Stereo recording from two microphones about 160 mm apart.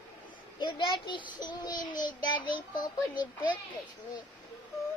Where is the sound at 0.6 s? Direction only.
30° left (ahead or behind).